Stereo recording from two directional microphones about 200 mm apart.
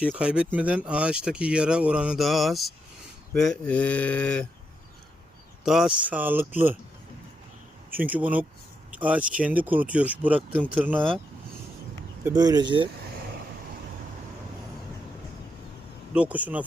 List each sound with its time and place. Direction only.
0.0 s speech: 5° right (ahead or behind)
5.6 s speech: centre (ahead or behind)
7.9 s speech: 10° right (ahead or behind)
12.2 s speech: 20° right (ahead or behind)
16.1 s speech: 5° right (ahead or behind)